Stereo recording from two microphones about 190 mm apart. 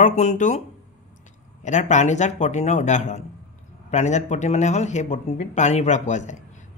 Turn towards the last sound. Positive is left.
turn(degrees=40)  # may be behind; listen again after turning